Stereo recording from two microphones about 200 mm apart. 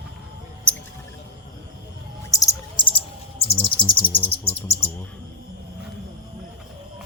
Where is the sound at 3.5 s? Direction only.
25° left (ahead or behind).